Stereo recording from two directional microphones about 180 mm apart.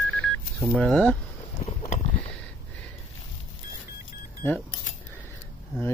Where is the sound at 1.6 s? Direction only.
45° left (ahead or behind).